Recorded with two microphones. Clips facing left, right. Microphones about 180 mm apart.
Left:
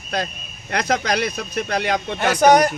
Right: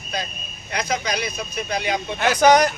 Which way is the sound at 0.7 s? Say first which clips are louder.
Left 4 dB; 90° left.